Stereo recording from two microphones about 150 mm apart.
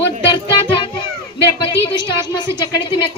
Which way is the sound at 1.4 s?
35° left (ahead or behind).